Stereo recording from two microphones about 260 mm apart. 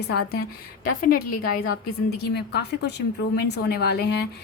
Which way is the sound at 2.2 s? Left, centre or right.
Left.